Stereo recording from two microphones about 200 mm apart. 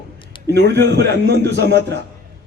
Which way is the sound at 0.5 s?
55° right (ahead or behind).